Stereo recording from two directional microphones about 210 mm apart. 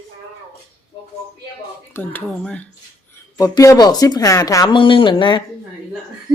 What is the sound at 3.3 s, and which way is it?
Speech, 15° left (ahead or behind).